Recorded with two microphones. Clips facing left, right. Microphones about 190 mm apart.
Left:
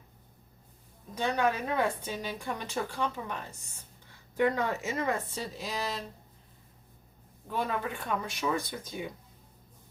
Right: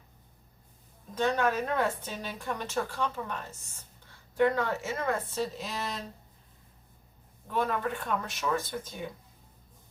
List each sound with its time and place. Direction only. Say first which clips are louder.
1.1 s a woman's voice: right 1 dB; 15° left (ahead or behind)
4.4 s a woman's voice: right 1 dB; 15° left (ahead or behind)
7.5 s a woman's voice: right 2 dB; 10° left (ahead or behind)